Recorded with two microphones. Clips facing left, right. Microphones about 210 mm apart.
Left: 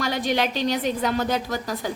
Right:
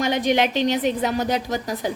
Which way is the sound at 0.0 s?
20° right (ahead or behind).